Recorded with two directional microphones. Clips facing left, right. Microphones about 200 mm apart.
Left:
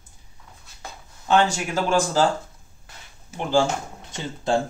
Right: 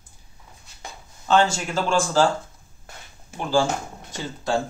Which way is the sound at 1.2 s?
15° left (ahead or behind).